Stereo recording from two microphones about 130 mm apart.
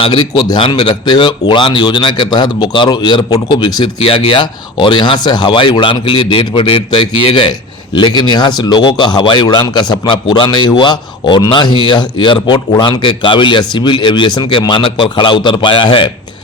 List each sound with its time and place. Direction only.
0.0 s speech: 35° left (ahead or behind)
4.0 s speech: 45° left (ahead or behind)